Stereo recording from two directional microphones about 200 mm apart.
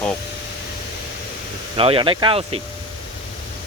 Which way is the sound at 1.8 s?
25° right (ahead or behind).